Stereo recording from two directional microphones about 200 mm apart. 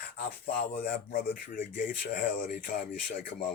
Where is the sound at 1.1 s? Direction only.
45° left (ahead or behind).